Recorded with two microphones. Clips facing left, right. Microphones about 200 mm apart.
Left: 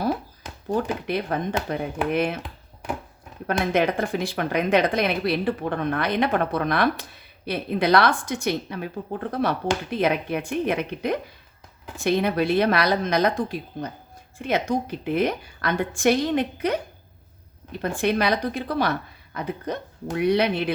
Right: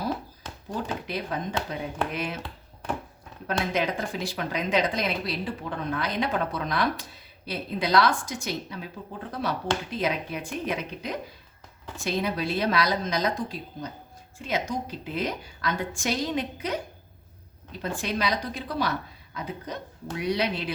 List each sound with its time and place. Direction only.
0.4 s a sound: 10° left (ahead or behind)
1.0 s speech: 60° left (ahead or behind)
3.4 s speech: 60° left (ahead or behind)